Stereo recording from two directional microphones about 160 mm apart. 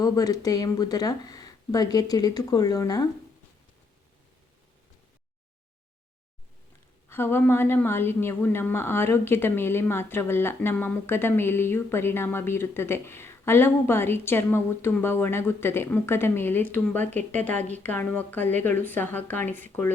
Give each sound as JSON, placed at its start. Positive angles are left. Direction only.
{"t": 0.0, "sound": "speech", "side_deg": 25}
{"t": 7.1, "sound": "a woman's voice", "side_deg": 15}